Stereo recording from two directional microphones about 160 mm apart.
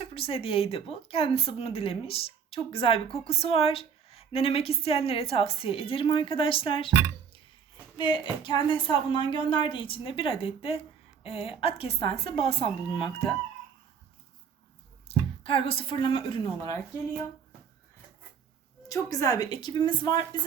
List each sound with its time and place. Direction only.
0.0 s a woman's voice: 35° left (ahead or behind)
7.9 s a woman's voice: 30° left (ahead or behind)
15.1 s a sound: 35° left (ahead or behind)
15.4 s a woman's voice: 35° left (ahead or behind)
18.9 s a woman's voice: 20° left (ahead or behind)